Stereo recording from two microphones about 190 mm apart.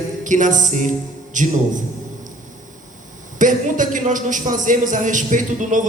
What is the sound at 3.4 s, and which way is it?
A man's voice, 45° right (ahead or behind).